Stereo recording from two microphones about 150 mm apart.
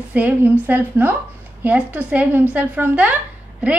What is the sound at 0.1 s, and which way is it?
A woman's voice, 10° right (ahead or behind).